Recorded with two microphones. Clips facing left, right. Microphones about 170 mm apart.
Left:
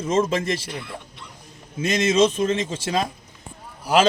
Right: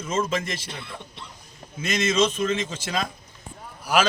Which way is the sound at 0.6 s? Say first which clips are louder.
Left 4 dB; 25° right (ahead or behind).